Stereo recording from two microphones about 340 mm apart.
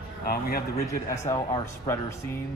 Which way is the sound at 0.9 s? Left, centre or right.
Centre.